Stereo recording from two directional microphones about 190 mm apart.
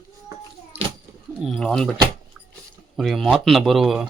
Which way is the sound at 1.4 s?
Centre (ahead or behind).